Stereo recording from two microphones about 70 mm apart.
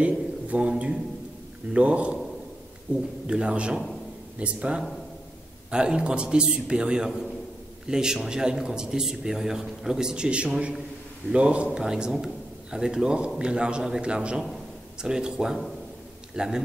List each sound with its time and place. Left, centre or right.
0.0 s a man's voice: centre
3.3 s a man's voice: centre